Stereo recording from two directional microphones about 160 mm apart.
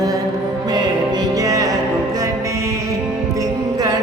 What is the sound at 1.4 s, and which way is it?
Music, 20° right (ahead or behind).